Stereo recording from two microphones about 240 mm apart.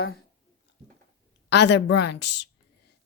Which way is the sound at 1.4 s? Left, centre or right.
Left.